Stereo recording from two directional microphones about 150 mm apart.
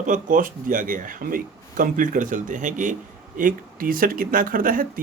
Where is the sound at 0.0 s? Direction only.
60° right (ahead or behind).